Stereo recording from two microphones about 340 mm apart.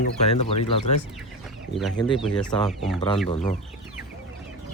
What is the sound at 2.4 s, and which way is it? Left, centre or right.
Speech, centre.